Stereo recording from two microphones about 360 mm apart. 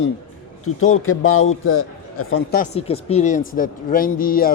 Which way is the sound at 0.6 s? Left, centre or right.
Left.